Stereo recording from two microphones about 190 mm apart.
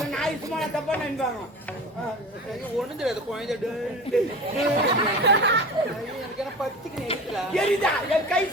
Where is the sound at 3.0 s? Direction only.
Centre (ahead or behind).